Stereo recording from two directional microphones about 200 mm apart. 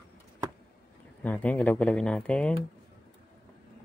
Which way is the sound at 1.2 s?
10° left (ahead or behind).